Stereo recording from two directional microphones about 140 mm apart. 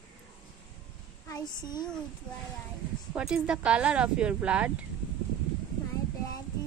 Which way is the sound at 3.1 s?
5° right (ahead or behind).